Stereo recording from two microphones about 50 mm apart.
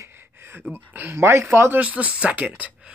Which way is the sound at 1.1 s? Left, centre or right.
Right.